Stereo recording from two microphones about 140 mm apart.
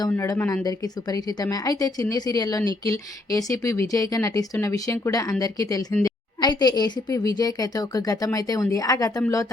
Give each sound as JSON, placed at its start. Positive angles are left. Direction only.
{"t": 0.2, "sound": "speech", "side_deg": 20}